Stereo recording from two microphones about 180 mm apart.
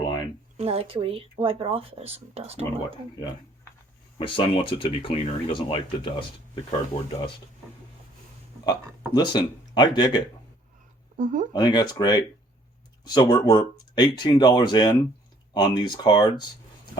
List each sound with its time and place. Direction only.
0.5 s speech: 35° right (ahead or behind)
4.2 s speech: 30° left (ahead or behind)
8.6 s speech: 25° left (ahead or behind)
11.2 s speech: 45° right (ahead or behind)
11.5 s speech: 25° left (ahead or behind)